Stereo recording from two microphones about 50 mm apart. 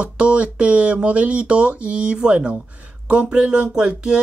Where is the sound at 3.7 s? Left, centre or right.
Centre.